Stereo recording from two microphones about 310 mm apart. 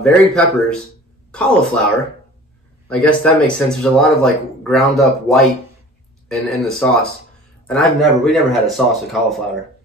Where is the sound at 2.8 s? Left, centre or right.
Centre.